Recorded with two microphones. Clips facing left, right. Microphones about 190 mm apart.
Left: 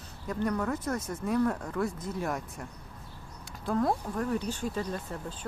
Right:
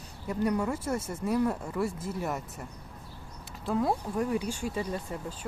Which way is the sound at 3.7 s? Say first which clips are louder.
Even; 5° right (ahead or behind).